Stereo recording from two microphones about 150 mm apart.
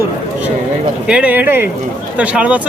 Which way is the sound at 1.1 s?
10° right (ahead or behind).